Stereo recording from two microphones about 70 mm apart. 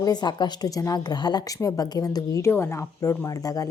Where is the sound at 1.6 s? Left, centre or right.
Left.